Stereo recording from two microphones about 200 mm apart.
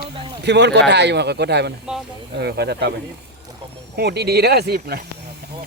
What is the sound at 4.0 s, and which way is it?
Speech, 55° right (ahead or behind).